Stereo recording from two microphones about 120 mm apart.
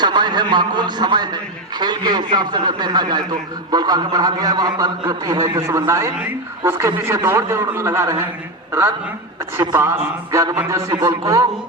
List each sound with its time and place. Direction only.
0.0 s a man's voice: 40° right (ahead or behind)
9.6 s a man's voice: 20° right (ahead or behind)